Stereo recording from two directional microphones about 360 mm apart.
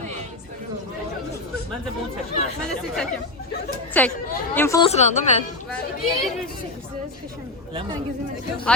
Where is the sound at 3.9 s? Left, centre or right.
Centre.